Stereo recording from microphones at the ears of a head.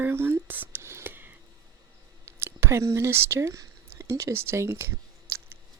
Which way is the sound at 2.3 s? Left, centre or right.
Right.